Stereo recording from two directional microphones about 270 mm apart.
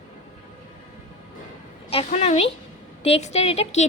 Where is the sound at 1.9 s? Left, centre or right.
Left.